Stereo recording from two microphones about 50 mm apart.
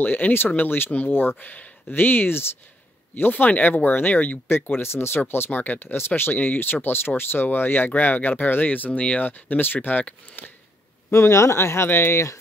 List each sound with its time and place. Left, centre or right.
0.0 s speech: left
1.4 s speech: left
1.9 s speech: left
4.5 s speech: left
6.3 s speech: left
11.1 s speech: left